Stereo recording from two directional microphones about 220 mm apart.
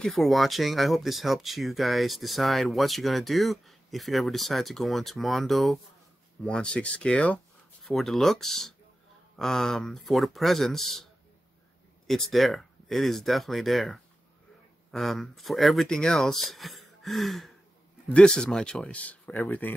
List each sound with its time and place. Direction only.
0.0 s speech: centre (ahead or behind)
12.1 s speech: centre (ahead or behind)